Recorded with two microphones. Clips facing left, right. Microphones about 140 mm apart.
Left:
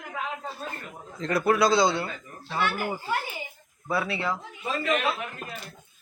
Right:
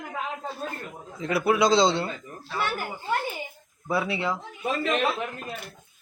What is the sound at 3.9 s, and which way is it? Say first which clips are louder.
Speech: right 1 dB; 20° right (ahead or behind).